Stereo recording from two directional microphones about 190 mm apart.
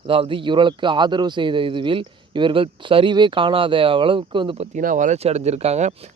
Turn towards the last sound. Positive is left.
turn(degrees=-35)  # may be behind; listen again after turning